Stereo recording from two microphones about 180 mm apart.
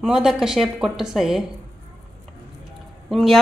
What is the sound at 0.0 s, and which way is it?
Speech, centre (ahead or behind).